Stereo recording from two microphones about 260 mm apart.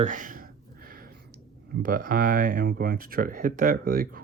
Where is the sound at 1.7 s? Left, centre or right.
Right.